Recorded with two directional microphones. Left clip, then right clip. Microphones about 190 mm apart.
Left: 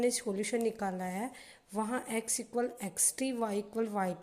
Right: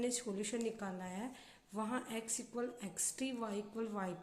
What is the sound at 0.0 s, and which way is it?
Speech, 25° left (ahead or behind).